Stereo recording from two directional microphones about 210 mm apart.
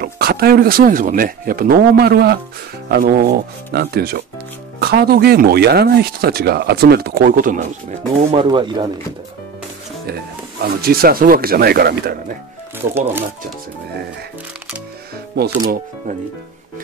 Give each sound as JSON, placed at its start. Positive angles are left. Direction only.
{"t": 0.0, "sound": "speech", "side_deg": -45}
{"t": 8.3, "sound": "speech", "side_deg": -25}
{"t": 10.0, "sound": "speech", "side_deg": -50}
{"t": 12.7, "sound": "speech", "side_deg": -10}
{"t": 15.3, "sound": "speech", "side_deg": -45}